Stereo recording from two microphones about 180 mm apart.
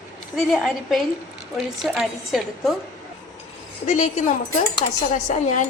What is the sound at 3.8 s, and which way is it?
Speech, 45° left (ahead or behind).